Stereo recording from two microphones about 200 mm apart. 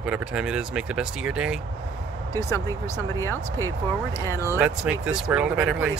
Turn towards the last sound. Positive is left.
turn(degrees=-5)  # may be behind; listen again after turning